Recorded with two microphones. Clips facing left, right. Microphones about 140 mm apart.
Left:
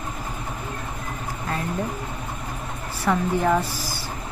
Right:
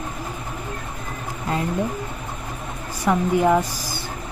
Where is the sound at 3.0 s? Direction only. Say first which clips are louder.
Right 3 dB; 15° right (ahead or behind).